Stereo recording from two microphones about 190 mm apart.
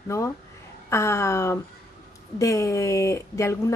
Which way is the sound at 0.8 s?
15° left (ahead or behind).